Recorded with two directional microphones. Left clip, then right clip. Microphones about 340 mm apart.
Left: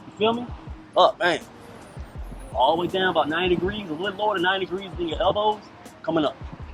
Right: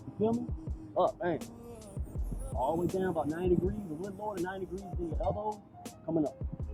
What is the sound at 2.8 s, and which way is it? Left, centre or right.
Speech, centre.